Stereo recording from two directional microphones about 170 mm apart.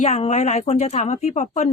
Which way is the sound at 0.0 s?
40° left (ahead or behind).